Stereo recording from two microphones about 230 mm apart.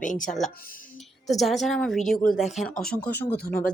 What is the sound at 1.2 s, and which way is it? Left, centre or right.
Speech, centre.